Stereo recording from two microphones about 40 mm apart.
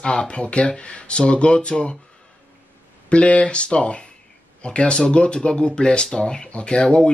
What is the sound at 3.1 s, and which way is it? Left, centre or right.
Speech, left.